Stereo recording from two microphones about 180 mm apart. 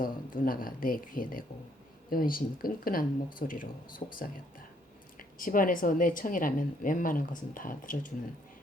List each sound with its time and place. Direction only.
0.0 s speech: 55° left (ahead or behind)
4.0 s speech: 35° left (ahead or behind)
5.4 s speech: 50° left (ahead or behind)